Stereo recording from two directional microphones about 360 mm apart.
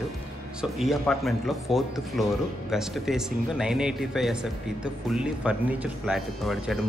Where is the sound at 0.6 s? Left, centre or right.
Centre.